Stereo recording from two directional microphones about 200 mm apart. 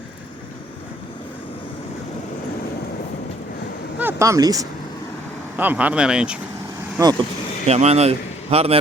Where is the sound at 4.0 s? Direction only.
10° right (ahead or behind).